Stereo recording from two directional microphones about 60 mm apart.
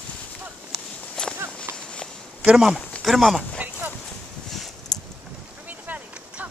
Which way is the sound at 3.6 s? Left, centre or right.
Right.